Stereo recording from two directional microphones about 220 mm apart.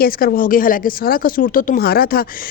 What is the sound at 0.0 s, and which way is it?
Speech, 40° left (ahead or behind).